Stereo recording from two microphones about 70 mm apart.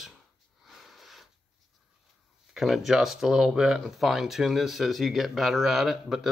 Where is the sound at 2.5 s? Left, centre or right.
Centre.